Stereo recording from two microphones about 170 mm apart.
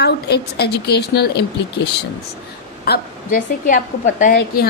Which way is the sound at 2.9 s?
55° left (ahead or behind).